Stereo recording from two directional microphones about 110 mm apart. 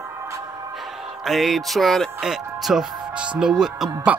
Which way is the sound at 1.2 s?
Centre (ahead or behind).